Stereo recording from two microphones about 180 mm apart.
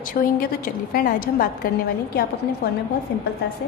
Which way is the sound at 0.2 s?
50° left (ahead or behind).